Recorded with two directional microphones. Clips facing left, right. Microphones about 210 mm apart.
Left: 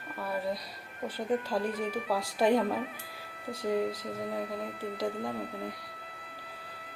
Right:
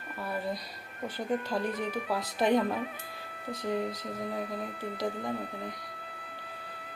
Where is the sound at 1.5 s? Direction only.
5° left (ahead or behind).